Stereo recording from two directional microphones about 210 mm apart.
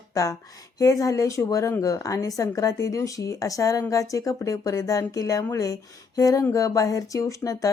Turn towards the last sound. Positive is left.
turn(degrees=15)  # may be behind; listen again after turning